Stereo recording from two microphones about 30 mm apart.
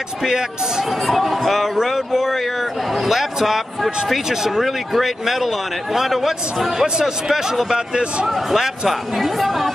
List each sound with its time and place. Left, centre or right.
0.2 s speech: right
0.8 s speech: centre; by 8.3 s right
8.3 s speech: centre